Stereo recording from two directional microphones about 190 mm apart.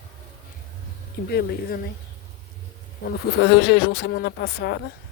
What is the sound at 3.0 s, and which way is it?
Speech, 55° left (ahead or behind).